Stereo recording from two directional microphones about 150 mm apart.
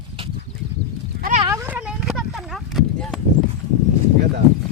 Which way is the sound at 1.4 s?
15° right (ahead or behind).